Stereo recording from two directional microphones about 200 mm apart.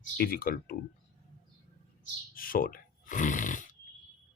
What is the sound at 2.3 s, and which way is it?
Snoring, 45° left (ahead or behind).